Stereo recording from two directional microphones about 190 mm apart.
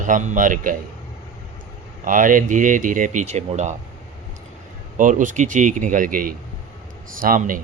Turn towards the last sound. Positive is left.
turn(degrees=-45)  # may be behind; listen again after turning